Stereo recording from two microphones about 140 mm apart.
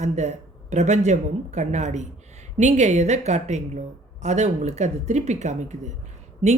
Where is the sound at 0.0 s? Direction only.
55° right (ahead or behind).